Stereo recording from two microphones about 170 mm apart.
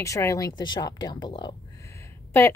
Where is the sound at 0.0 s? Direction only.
20° left (ahead or behind).